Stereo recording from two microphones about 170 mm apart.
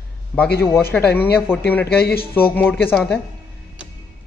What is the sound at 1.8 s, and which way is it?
Speech, 70° left (ahead or behind).